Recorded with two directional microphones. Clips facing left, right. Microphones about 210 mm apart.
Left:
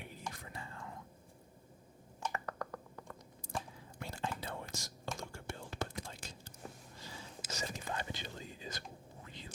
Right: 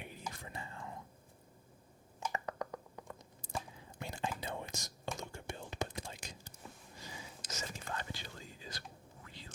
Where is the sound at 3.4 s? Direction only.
25° right (ahead or behind).